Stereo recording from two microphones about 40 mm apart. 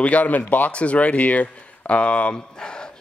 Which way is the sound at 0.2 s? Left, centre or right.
Left.